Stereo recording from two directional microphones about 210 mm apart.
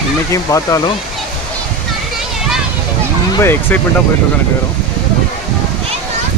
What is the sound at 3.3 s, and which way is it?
Speech, 10° left (ahead or behind).